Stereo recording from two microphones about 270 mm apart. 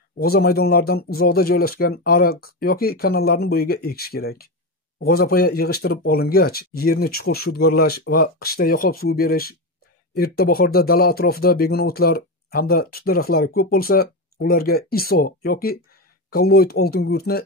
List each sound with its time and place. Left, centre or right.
0.2 s speech: left